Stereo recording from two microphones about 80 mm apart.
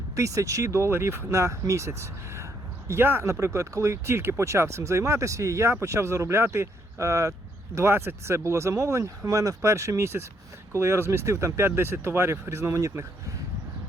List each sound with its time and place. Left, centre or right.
0.2 s speech: right